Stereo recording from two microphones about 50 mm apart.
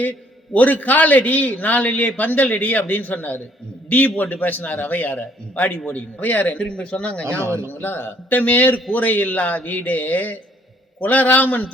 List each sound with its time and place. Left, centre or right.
0.0 s a man's voice: left
6.7 s speech: left
7.4 s speech: right
7.7 s speech: left
8.3 s a man's voice: left